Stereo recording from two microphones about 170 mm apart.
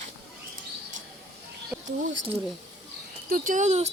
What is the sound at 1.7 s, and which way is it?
Speech, 10° right (ahead or behind).